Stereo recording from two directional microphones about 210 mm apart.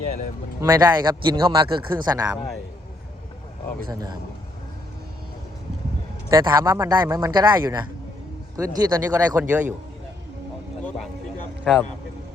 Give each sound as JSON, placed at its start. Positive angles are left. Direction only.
{"t": 0.6, "sound": "speech", "side_deg": -20}
{"t": 3.8, "sound": "speech", "side_deg": -20}
{"t": 6.2, "sound": "a man's voice", "side_deg": -15}
{"t": 9.4, "sound": "a man's voice", "side_deg": -5}
{"t": 10.8, "sound": "speech", "side_deg": 0}